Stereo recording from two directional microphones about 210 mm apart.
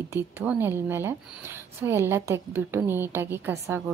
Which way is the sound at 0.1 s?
10° right (ahead or behind).